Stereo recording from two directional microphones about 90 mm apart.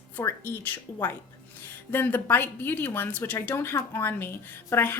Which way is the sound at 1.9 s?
25° left (ahead or behind).